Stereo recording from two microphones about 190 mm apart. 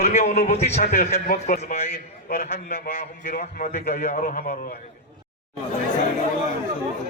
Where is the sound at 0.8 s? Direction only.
50° left (ahead or behind).